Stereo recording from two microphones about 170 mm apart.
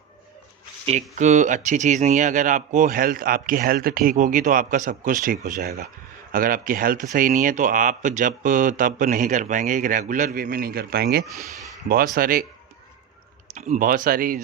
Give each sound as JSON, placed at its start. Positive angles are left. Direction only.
{"t": 0.9, "sound": "speech", "side_deg": -45}
{"t": 5.5, "sound": "speech", "side_deg": -65}
{"t": 6.3, "sound": "speech", "side_deg": -55}
{"t": 13.5, "sound": "speech", "side_deg": -45}